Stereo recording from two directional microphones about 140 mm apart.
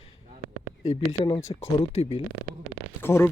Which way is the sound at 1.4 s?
20° left (ahead or behind).